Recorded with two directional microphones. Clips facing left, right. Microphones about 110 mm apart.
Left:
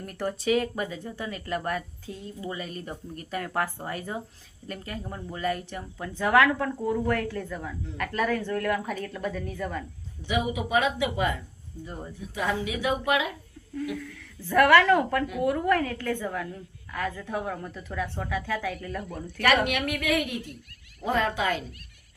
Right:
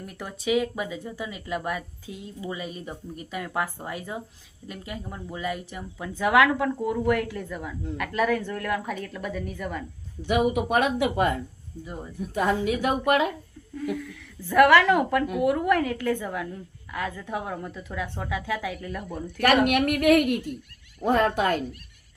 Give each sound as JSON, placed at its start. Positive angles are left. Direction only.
{"t": 0.0, "sound": "speech", "side_deg": -5}
{"t": 9.0, "sound": "speech", "side_deg": -5}
{"t": 10.2, "sound": "a woman's voice", "side_deg": -55}
{"t": 14.5, "sound": "speech", "side_deg": -10}
{"t": 19.6, "sound": "a woman's voice", "side_deg": -50}